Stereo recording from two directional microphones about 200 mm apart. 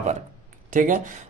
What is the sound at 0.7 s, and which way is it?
Speech, 40° right (ahead or behind).